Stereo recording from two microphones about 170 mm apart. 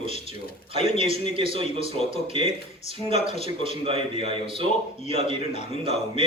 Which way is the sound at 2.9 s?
40° left (ahead or behind).